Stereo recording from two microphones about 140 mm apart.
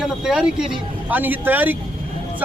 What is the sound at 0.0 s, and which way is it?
A man's voice, 5° right (ahead or behind).